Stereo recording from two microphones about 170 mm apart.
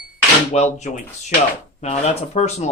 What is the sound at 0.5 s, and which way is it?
Speech, 40° left (ahead or behind).